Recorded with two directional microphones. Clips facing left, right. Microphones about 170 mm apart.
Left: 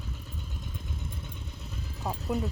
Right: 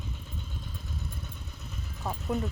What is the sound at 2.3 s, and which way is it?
Speech, centre (ahead or behind).